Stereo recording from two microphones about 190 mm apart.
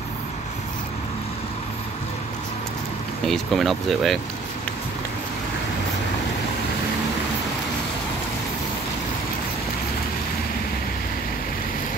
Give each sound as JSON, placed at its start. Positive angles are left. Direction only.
{"t": 3.3, "sound": "speech", "side_deg": 0}